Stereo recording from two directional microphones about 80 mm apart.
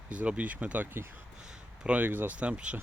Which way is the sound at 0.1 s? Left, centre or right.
Centre.